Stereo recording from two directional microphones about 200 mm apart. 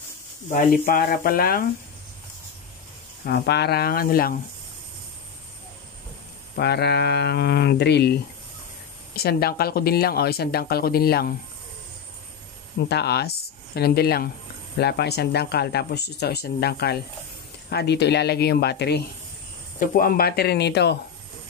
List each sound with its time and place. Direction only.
0.5 s speech: 40° left (ahead or behind)
3.3 s speech: 55° left (ahead or behind)
6.5 s speech: 55° left (ahead or behind)
12.8 s speech: 55° left (ahead or behind)